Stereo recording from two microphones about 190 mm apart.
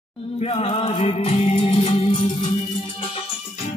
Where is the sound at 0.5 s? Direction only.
30° left (ahead or behind).